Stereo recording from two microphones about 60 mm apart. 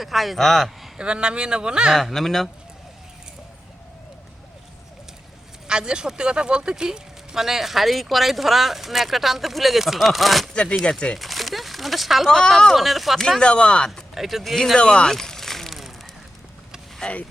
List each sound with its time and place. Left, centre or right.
0.0 s speech: centre
0.9 s speech: centre
2.0 s speech: centre
5.6 s speech: centre
10.5 s speech: centre
12.3 s speech: centre
12.7 s speech: centre
13.4 s speech: centre
14.2 s speech: centre
14.8 s a sound: centre
17.0 s speech: centre